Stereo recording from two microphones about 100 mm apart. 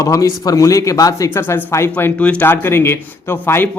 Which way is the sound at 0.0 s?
35° left (ahead or behind).